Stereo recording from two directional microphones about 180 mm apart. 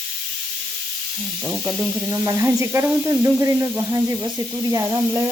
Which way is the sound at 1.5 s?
Centre (ahead or behind).